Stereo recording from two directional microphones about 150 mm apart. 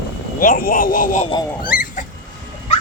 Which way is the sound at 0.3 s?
70° left (ahead or behind).